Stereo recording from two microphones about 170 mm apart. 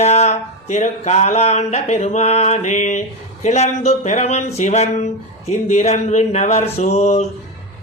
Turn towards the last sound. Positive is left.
turn(degrees=40)  # may be behind; listen again after turning